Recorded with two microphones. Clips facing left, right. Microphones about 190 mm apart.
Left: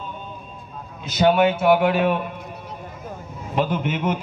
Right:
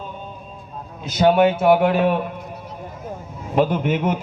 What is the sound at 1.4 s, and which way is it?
Speech, 45° right (ahead or behind).